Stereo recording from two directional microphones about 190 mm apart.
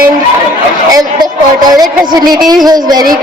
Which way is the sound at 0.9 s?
20° right (ahead or behind).